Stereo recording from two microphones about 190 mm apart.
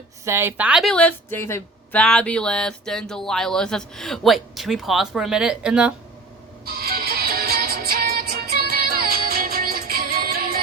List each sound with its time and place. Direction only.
0.3 s a woman's voice: 10° right (ahead or behind)
6.7 s music: 55° right (ahead or behind)